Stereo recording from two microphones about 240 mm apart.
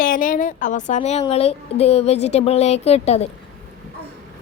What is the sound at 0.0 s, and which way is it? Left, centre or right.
A woman's voice, left.